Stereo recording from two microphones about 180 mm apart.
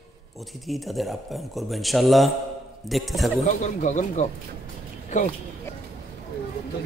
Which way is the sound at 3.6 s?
45° left (ahead or behind).